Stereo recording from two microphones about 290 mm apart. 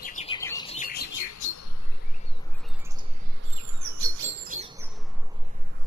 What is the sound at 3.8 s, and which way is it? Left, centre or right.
Chirp, right.